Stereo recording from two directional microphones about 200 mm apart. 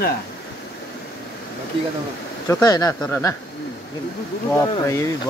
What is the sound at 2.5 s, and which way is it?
Speech, 20° left (ahead or behind).